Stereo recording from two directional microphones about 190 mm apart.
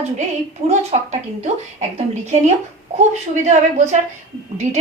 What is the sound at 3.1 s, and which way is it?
Speech, 35° right (ahead or behind).